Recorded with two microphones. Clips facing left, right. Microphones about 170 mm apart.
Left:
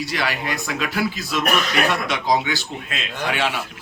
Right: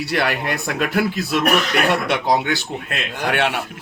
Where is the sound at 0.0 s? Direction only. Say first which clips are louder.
Right 4 dB; 60° right (ahead or behind).